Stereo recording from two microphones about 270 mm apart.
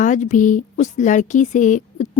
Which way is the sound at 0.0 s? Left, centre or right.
Left.